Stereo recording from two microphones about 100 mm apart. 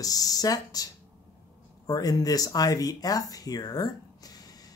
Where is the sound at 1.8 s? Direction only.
40° left (ahead or behind).